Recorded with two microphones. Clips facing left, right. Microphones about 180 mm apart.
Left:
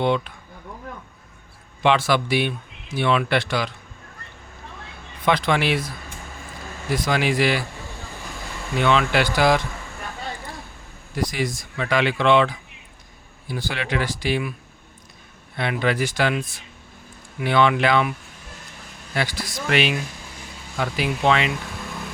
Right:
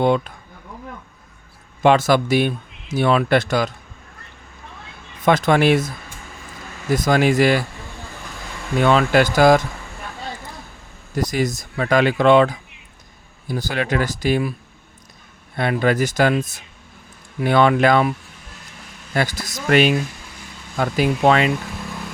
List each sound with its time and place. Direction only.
0.0 s speech: 45° right (ahead or behind)
1.8 s speech: 45° right (ahead or behind)
5.2 s speech: 45° right (ahead or behind)
6.9 s speech: 45° right (ahead or behind)
8.8 s speech: 40° right (ahead or behind)
11.1 s speech: 45° right (ahead or behind)
15.5 s speech: 45° right (ahead or behind)
19.1 s speech: 45° right (ahead or behind)